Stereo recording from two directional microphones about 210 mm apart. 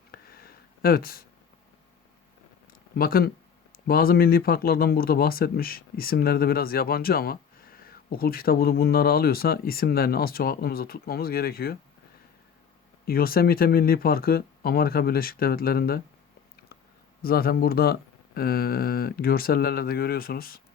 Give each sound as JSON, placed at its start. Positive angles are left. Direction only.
{"t": 0.1, "sound": "a sound", "side_deg": 45}
{"t": 2.9, "sound": "speech", "side_deg": 45}
{"t": 13.1, "sound": "speech", "side_deg": 45}
{"t": 17.2, "sound": "speech", "side_deg": 45}